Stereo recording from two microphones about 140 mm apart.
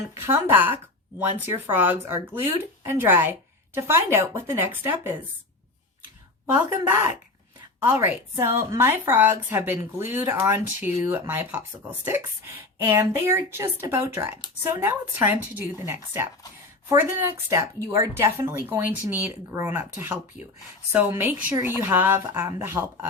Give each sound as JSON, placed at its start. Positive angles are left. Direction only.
{"t": 0.1, "sound": "a woman's voice", "side_deg": -20}
{"t": 6.5, "sound": "a woman's voice", "side_deg": -15}